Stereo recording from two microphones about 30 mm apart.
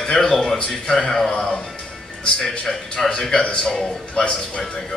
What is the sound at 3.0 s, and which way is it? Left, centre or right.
Speech, centre.